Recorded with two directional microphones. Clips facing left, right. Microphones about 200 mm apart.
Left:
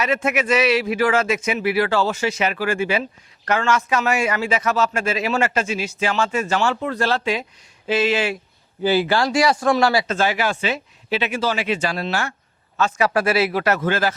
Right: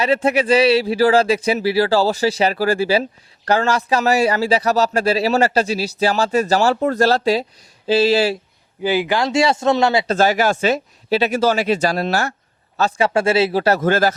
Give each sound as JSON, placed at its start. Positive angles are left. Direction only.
{"t": 0.0, "sound": "speech", "side_deg": -30}
{"t": 8.8, "sound": "speech", "side_deg": -15}
{"t": 10.1, "sound": "speech", "side_deg": -40}